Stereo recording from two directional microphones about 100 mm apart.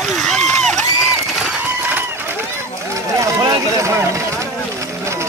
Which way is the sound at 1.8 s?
20° right (ahead or behind).